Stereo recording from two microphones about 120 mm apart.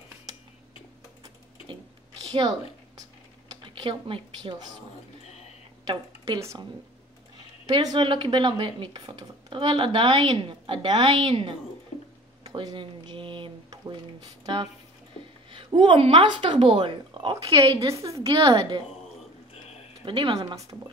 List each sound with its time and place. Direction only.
2.1 s a sound: 35° right (ahead or behind)
5.9 s speech: 35° right (ahead or behind)
7.7 s speech: 40° right (ahead or behind)
12.4 s a sound: 40° right (ahead or behind)
14.4 s speech: 40° right (ahead or behind)
17.7 s a woman's voice: 25° right (ahead or behind)
20.1 s speech: 45° right (ahead or behind)
20.3 s speech: 30° right (ahead or behind)